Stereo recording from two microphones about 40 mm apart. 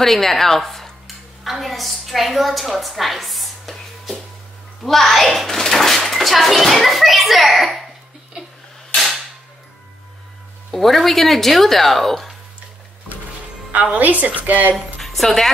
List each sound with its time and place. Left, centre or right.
0.0 s a woman's voice: centre
10.7 s a child's voice: centre
13.9 s a woman's voice: right
15.0 s a woman's voice: centre